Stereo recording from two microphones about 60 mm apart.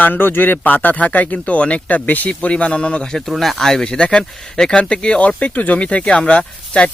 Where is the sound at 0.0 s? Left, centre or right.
Left; by 3.2 s centre.